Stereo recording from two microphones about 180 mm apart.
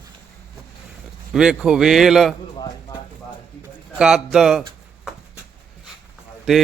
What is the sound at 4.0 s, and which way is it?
Speech, 5° right (ahead or behind).